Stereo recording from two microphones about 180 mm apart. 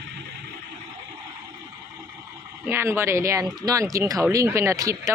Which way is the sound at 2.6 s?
15° right (ahead or behind).